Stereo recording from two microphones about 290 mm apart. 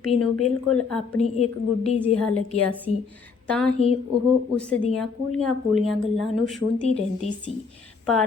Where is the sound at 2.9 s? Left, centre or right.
Left.